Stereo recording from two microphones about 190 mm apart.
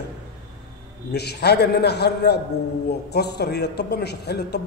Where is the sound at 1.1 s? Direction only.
60° left (ahead or behind).